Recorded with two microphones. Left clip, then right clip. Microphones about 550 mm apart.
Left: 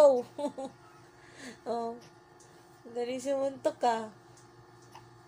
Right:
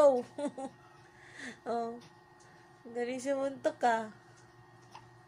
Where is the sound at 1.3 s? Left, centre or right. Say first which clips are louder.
Left 1 dB; right.